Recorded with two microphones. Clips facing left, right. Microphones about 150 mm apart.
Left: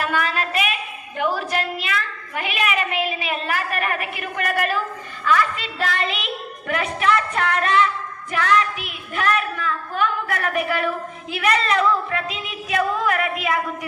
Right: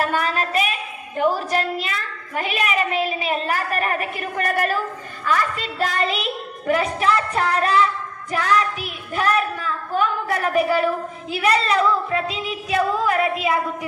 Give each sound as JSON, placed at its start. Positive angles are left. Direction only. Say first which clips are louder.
{"t": 0.0, "sound": "a woman's voice", "louder": "right 2 dB", "side_deg": -40}